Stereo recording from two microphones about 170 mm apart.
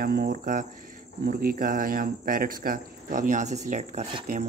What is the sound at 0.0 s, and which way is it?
Speech, 60° right (ahead or behind).